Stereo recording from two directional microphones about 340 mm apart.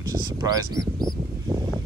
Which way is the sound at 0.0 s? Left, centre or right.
Centre.